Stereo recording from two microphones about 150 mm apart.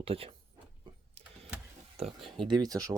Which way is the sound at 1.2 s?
40° right (ahead or behind).